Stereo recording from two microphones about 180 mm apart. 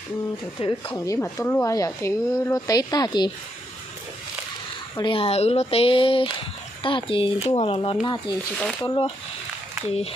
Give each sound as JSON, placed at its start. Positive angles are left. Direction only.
{"t": 0.6, "sound": "speech", "side_deg": 30}
{"t": 0.9, "sound": "speech", "side_deg": 15}
{"t": 4.9, "sound": "speech", "side_deg": 30}